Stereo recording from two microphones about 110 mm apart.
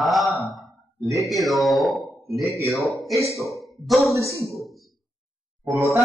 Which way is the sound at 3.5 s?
Centre (ahead or behind).